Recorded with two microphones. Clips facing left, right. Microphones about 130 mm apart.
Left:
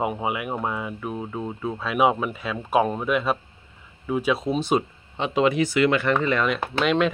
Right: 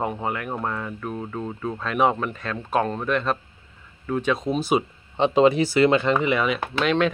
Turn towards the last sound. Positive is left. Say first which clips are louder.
# even
turn(degrees=0)  # may be behind; listen again after turning